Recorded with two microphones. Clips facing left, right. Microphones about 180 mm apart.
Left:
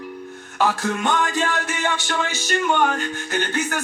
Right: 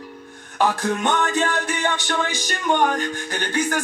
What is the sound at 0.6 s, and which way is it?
Music, 15° right (ahead or behind).